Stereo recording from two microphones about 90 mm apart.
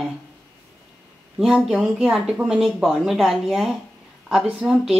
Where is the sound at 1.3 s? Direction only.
5° right (ahead or behind).